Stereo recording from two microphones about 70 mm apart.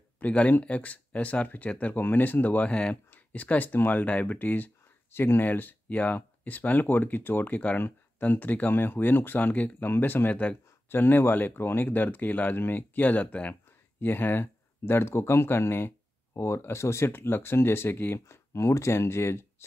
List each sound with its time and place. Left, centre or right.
0.2 s speech: centre; by 19.4 s left